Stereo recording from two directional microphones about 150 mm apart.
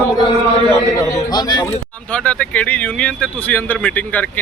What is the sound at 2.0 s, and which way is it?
Speech, 10° left (ahead or behind).